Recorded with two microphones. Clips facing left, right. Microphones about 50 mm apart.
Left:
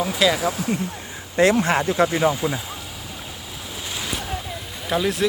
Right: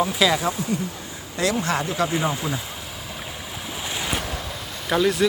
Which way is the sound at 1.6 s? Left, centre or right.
Left.